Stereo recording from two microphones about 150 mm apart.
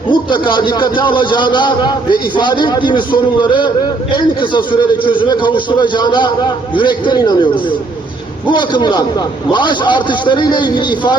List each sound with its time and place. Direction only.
0.1 s a man's voice: 30° left (ahead or behind)